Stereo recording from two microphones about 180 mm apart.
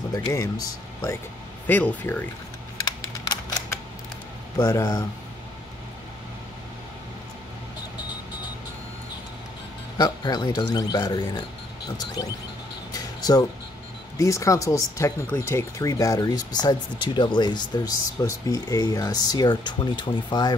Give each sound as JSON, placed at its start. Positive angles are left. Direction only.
{"t": 0.1, "sound": "speech", "side_deg": 20}
{"t": 1.7, "sound": "speech", "side_deg": 10}
{"t": 4.6, "sound": "speech", "side_deg": 20}
{"t": 9.9, "sound": "speech", "side_deg": 25}
{"t": 12.9, "sound": "a sound", "side_deg": 20}
{"t": 14.1, "sound": "speech", "side_deg": 15}